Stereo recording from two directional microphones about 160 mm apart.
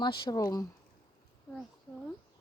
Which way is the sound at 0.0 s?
30° left (ahead or behind).